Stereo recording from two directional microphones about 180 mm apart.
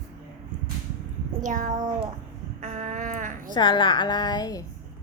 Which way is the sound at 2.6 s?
40° right (ahead or behind).